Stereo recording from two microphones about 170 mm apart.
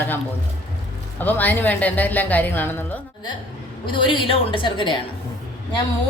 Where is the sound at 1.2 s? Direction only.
10° left (ahead or behind).